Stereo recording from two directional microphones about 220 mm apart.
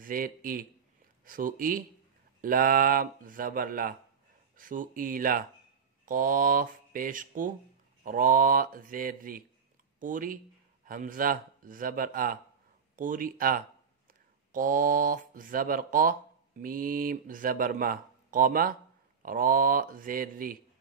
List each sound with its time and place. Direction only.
0.0 s speech: 40° right (ahead or behind)